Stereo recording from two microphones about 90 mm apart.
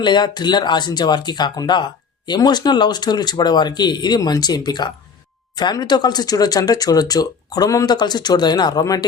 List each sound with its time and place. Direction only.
0.0 s speech: 55° left (ahead or behind)